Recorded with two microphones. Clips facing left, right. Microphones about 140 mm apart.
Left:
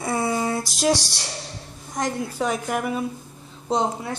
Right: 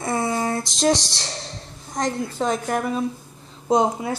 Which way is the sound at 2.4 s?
35° right (ahead or behind).